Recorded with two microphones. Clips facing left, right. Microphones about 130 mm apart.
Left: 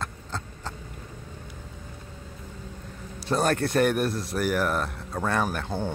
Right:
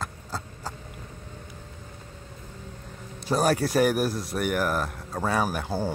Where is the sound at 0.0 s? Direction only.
5° right (ahead or behind).